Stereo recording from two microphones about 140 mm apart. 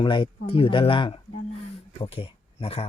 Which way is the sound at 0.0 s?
35° left (ahead or behind).